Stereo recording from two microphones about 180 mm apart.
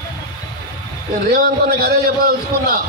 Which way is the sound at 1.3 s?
55° right (ahead or behind).